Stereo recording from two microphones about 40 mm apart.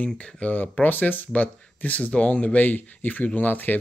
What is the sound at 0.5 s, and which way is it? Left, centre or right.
Speech, left.